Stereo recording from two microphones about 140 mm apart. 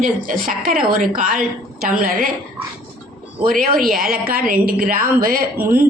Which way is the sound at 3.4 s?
90° right.